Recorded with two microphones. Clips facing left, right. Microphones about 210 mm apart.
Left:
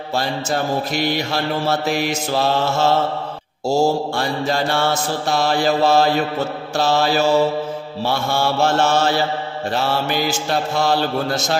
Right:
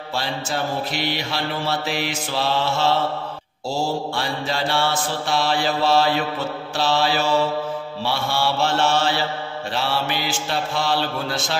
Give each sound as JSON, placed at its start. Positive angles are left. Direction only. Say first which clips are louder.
{"t": 0.1, "sound": "mantra", "louder": "left 5 dB", "side_deg": 45}